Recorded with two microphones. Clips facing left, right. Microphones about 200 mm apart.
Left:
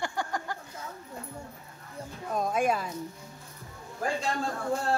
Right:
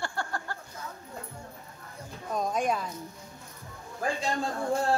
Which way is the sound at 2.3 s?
5° left (ahead or behind).